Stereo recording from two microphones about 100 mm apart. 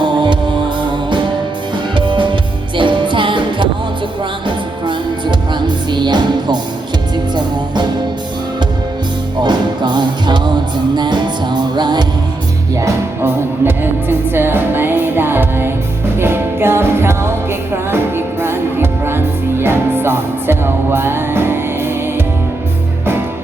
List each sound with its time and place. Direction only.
0.0 s music: 50° right (ahead or behind)
2.0 s music: 55° right (ahead or behind)
9.4 s music: 50° right (ahead or behind)
12.7 s music: 25° right (ahead or behind)